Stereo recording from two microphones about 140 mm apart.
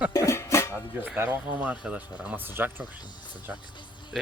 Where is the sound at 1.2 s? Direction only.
10° right (ahead or behind).